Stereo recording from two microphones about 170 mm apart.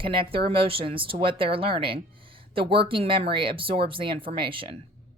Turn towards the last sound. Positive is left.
turn(degrees=-30)  # may be behind; listen again after turning